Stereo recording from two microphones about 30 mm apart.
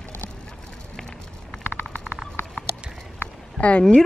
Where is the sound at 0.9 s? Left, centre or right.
Centre.